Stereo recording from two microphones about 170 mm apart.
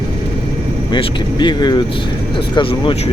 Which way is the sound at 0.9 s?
25° left (ahead or behind).